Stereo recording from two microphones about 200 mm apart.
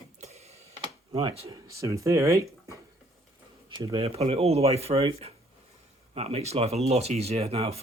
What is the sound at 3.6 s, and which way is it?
Speech, 20° right (ahead or behind).